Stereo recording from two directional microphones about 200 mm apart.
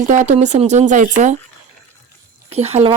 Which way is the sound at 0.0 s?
40° right (ahead or behind).